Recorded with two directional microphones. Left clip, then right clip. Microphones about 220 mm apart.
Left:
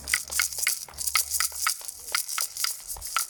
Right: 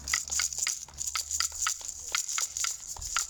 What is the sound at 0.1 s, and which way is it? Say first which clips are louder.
Crushing: left 3 dB; 15° right (ahead or behind).